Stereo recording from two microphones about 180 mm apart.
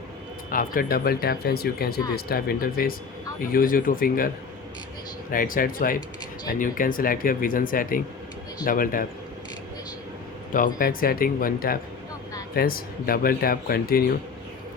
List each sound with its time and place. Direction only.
0.5 s speech: 50° left (ahead or behind)
5.3 s speech: 50° left (ahead or behind)
10.5 s speech: 50° left (ahead or behind)